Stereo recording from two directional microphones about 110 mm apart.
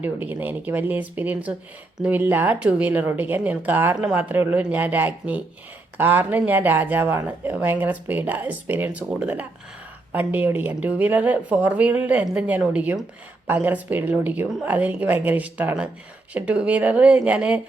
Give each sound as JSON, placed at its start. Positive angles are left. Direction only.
{"t": 0.0, "sound": "speech", "side_deg": -15}